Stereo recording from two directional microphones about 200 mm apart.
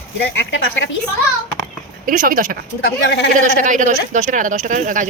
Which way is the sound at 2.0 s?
45° right (ahead or behind).